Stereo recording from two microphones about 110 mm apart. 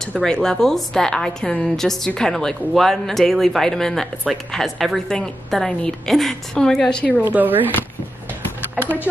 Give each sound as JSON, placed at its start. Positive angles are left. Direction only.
{"t": 0.2, "sound": "a woman's voice", "side_deg": 5}
{"t": 7.3, "sound": "speech", "side_deg": -15}
{"t": 8.7, "sound": "speech", "side_deg": 20}